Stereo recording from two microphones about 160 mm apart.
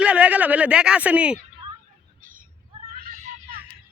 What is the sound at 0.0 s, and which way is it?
Speech, 5° right (ahead or behind).